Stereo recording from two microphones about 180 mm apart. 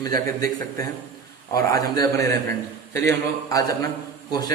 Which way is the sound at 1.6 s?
20° left (ahead or behind).